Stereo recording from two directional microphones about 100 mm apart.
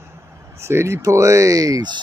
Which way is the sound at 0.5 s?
25° right (ahead or behind).